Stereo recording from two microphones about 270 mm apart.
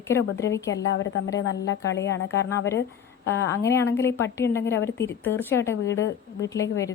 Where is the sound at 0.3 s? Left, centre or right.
Centre.